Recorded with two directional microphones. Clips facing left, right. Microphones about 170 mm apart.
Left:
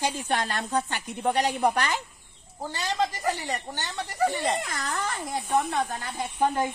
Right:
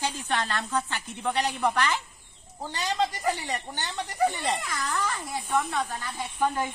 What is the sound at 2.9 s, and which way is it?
Speech, 10° left (ahead or behind).